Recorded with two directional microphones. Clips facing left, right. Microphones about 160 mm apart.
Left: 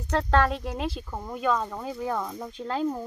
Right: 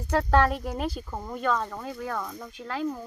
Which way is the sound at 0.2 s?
5° right (ahead or behind).